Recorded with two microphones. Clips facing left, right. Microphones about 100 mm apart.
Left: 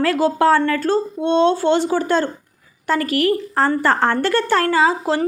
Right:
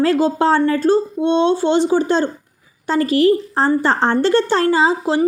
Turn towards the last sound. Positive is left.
turn(degrees=-20)  # may be behind; listen again after turning